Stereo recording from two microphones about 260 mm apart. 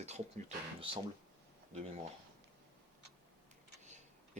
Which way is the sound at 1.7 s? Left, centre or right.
Right.